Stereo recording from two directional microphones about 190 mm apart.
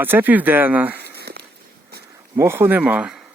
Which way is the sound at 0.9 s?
60° right (ahead or behind).